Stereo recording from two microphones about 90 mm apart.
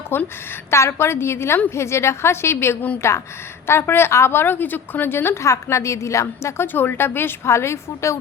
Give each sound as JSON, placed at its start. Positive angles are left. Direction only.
{"t": 0.1, "sound": "a woman's voice", "side_deg": 25}